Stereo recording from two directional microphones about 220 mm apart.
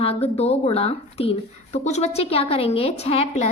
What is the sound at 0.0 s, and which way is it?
A woman's voice, 25° left (ahead or behind).